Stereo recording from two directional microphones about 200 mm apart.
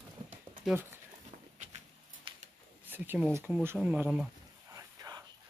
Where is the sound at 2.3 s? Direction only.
25° right (ahead or behind).